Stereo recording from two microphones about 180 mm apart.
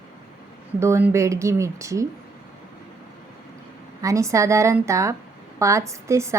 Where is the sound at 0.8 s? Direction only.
15° right (ahead or behind).